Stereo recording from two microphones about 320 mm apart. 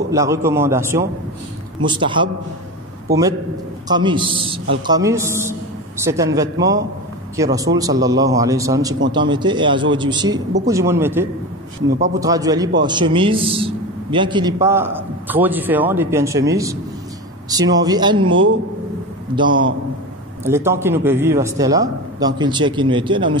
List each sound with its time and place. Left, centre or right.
0.1 s a man's voice: centre
3.9 s a man's voice: centre
18.2 s a man's voice: right
19.3 s a man's voice: centre